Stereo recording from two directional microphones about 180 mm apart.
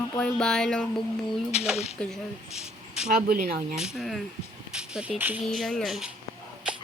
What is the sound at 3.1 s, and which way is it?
Speech, 55° right (ahead or behind).